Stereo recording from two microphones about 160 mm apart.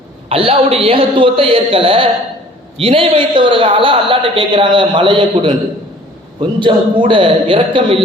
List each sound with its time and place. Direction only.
0.3 s a man's voice: 35° right (ahead or behind)